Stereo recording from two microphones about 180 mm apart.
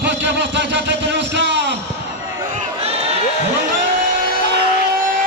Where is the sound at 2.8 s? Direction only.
35° right (ahead or behind).